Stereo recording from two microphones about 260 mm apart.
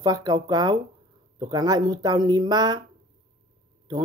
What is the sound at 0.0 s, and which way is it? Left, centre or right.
Speech, centre.